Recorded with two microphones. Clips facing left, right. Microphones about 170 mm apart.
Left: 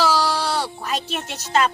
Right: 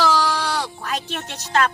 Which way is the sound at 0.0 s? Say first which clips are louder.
Even; 10° left (ahead or behind).